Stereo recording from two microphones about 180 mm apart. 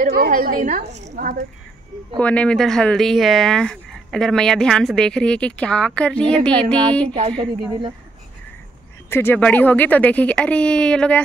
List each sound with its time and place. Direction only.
0.0 s a woman's voice: 55° right (ahead or behind)
2.1 s speech: 5° left (ahead or behind)
7.2 s a woman's voice: 30° right (ahead or behind)
9.1 s speech: 10° left (ahead or behind)